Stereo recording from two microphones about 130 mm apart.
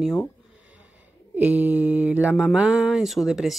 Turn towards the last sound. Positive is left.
turn(degrees=0)  # may be behind; listen again after turning